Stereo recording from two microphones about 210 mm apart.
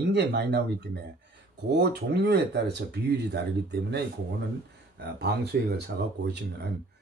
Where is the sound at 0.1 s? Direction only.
55° right (ahead or behind).